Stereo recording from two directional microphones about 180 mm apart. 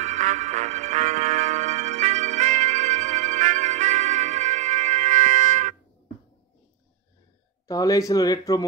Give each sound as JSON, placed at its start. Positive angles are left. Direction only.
{"t": 0.0, "sound": "music", "side_deg": -45}
{"t": 7.6, "sound": "speech", "side_deg": 20}